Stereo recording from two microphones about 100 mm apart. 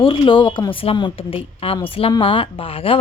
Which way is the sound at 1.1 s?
65° left (ahead or behind).